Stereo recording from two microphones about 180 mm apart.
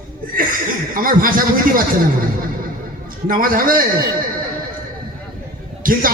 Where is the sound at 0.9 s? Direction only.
50° right (ahead or behind).